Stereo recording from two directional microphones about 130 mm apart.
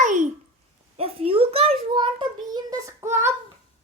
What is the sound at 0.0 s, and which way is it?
Babbling, 75° right (ahead or behind).